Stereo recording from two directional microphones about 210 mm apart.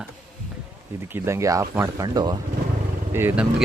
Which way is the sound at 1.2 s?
15° right (ahead or behind).